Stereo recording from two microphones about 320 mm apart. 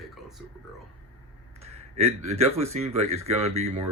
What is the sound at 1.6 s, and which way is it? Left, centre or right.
Speech, centre.